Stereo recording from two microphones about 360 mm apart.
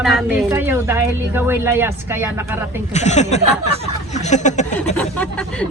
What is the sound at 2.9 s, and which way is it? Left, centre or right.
Speech, centre.